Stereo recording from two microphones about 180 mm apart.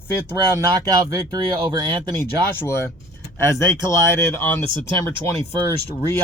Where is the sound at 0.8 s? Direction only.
20° right (ahead or behind).